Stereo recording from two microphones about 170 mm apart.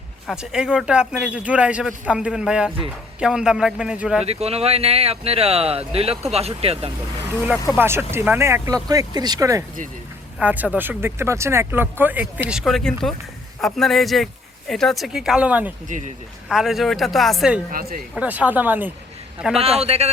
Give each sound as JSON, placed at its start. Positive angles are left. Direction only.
{"t": 0.3, "sound": "speech", "side_deg": -5}
{"t": 4.3, "sound": "speech", "side_deg": -35}
{"t": 7.8, "sound": "speech", "side_deg": -15}
{"t": 15.9, "sound": "speech", "side_deg": -45}
{"t": 16.5, "sound": "speech", "side_deg": 0}
{"t": 17.7, "sound": "speech", "side_deg": -55}
{"t": 18.1, "sound": "speech", "side_deg": -10}
{"t": 19.5, "sound": "speech", "side_deg": -35}